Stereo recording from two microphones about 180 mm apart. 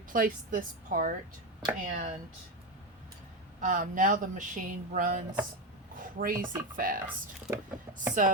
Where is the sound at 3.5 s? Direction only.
45° right (ahead or behind).